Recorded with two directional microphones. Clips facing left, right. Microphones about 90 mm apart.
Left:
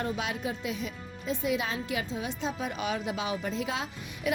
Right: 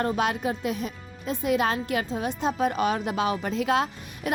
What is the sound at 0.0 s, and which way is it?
Speech, 55° right (ahead or behind).